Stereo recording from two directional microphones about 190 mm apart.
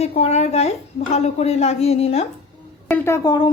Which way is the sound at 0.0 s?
35° left (ahead or behind).